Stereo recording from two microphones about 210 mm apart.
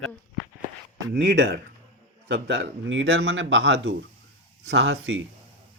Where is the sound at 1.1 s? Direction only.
55° right (ahead or behind).